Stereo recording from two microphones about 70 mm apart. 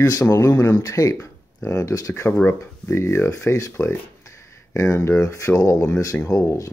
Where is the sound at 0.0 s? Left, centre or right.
Left.